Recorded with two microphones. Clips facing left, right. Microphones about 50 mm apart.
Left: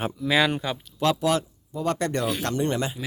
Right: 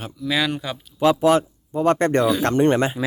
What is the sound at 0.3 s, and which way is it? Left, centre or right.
Speech, centre.